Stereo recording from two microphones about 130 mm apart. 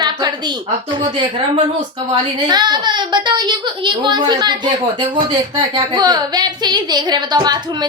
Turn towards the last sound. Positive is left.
turn(degrees=-30)  # may be behind; listen again after turning